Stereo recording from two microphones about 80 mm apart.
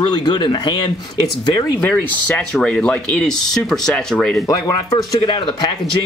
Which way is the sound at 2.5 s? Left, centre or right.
Centre.